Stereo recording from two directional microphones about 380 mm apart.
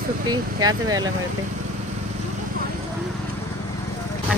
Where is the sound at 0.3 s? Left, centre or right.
Centre.